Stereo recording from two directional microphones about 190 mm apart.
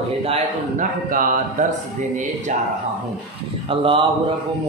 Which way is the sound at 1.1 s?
45° right (ahead or behind).